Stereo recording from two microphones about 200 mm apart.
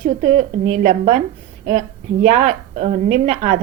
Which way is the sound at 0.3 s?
40° right (ahead or behind).